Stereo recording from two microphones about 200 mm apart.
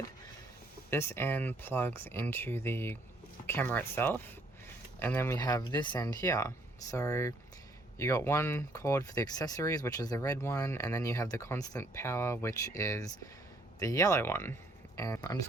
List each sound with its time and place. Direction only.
0.9 s speech: 10° left (ahead or behind)